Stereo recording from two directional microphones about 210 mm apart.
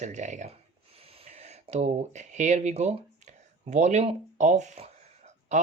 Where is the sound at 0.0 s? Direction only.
35° right (ahead or behind).